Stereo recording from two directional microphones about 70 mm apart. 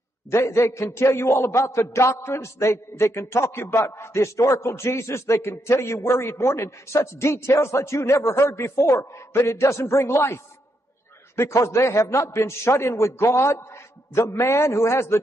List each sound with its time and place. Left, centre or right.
0.3 s a man's voice: left